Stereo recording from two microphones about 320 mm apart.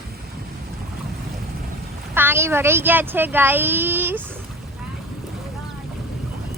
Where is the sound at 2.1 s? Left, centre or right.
Centre.